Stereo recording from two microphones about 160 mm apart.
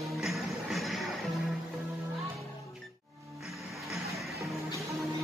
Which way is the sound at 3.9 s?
Centre (ahead or behind).